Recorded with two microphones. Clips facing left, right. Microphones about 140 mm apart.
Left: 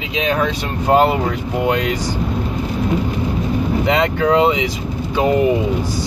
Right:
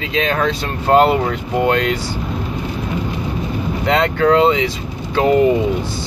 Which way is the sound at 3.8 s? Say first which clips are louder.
Right 3 dB; 15° left (ahead or behind).